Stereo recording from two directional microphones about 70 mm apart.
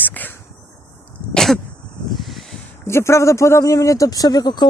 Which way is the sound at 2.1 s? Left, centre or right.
Centre.